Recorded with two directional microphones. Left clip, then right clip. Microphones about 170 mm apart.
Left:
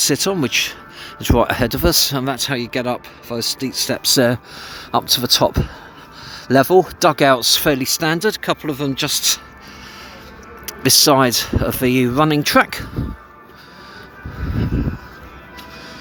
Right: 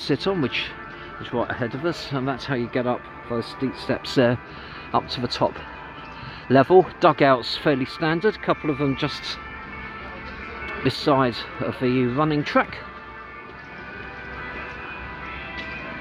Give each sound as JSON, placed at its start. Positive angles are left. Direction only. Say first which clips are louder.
{"t": 0.0, "sound": "speech", "louder": "left 6 dB", "side_deg": 40}
{"t": 1.2, "sound": "speech", "louder": "left 10 dB", "side_deg": 75}
{"t": 2.1, "sound": "speech", "louder": "left 5 dB", "side_deg": 45}
{"t": 10.7, "sound": "speech", "louder": "left 8 dB", "side_deg": 45}